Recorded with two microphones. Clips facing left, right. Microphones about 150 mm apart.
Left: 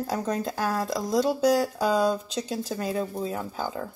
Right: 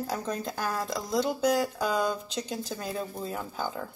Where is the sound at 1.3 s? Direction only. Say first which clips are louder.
Left 3 dB; 35° left (ahead or behind).